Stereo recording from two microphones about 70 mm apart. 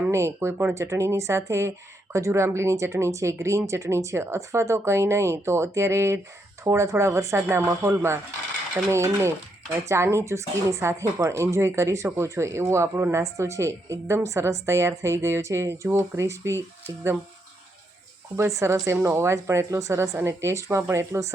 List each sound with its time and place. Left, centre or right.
0.1 s a woman's voice: right
18.3 s a woman's voice: right